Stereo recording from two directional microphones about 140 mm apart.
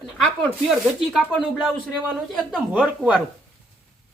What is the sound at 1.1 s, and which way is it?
Speech, 5° right (ahead or behind).